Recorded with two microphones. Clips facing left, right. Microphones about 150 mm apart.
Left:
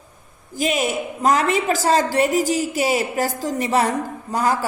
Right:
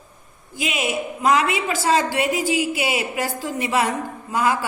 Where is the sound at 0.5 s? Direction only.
40° left (ahead or behind).